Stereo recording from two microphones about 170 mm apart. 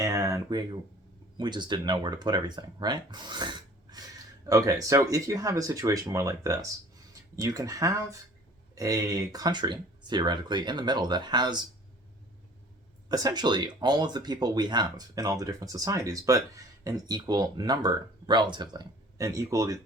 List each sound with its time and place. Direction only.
0.0 s a sound: 20° right (ahead or behind)
1.4 s speech: 25° right (ahead or behind)
13.1 s speech: 20° right (ahead or behind)